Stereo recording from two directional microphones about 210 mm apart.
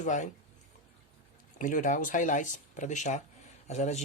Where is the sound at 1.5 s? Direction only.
40° left (ahead or behind).